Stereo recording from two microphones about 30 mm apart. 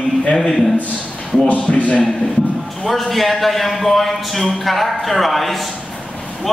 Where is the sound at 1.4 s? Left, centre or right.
Left.